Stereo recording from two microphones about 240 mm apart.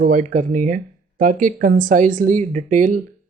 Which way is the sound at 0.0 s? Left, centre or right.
Right.